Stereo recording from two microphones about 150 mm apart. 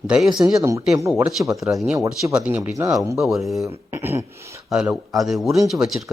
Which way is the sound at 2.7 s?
20° right (ahead or behind).